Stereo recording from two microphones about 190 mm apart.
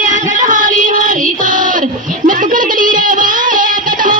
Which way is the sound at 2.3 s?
45° right (ahead or behind).